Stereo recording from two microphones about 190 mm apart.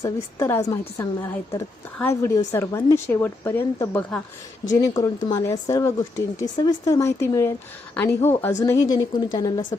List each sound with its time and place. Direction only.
0.0 s speech: 15° left (ahead or behind)